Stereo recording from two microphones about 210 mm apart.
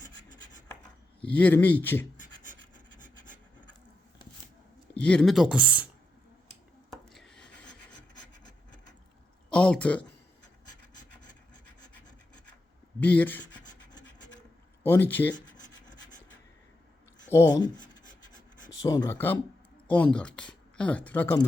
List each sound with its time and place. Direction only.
1.2 s speech: 5° left (ahead or behind)
4.9 s speech: 5° left (ahead or behind)
6.9 s rub: centre (ahead or behind)
7.7 s rub: 60° left (ahead or behind)
9.5 s speech: 5° left (ahead or behind)
11.2 s filing: 90° left
13.0 s speech: 5° left (ahead or behind)
14.8 s speech: 10° left (ahead or behind)
17.3 s speech: 20° left (ahead or behind)
18.8 s speech: 15° left (ahead or behind)